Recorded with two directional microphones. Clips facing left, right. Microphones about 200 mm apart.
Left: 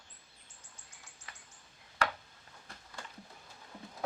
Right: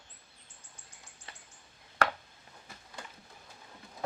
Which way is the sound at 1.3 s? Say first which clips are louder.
Right 2 dB; 30° right (ahead or behind).